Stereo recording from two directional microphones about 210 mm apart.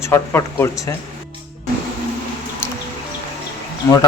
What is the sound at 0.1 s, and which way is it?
Speech, 10° left (ahead or behind).